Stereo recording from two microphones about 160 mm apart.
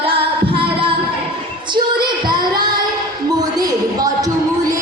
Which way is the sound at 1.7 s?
25° right (ahead or behind).